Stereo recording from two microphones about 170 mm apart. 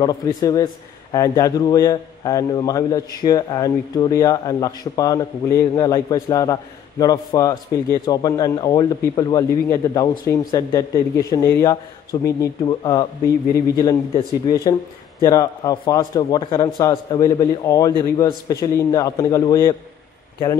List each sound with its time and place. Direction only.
0.0 s a man's voice: 25° left (ahead or behind)
14.5 s a man's voice: 20° left (ahead or behind)